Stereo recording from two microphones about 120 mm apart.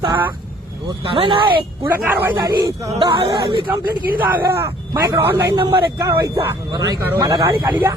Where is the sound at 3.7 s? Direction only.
20° right (ahead or behind).